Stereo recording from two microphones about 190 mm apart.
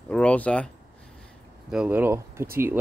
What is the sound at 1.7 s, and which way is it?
Speech, 5° right (ahead or behind).